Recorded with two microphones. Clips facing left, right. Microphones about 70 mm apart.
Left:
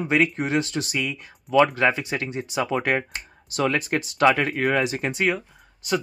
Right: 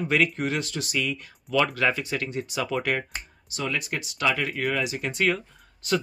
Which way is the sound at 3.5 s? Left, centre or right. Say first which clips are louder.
Left 7 dB; left.